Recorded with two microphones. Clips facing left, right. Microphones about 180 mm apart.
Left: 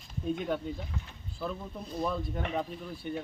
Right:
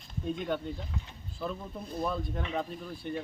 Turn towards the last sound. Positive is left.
turn(degrees=0)  # may be behind; listen again after turning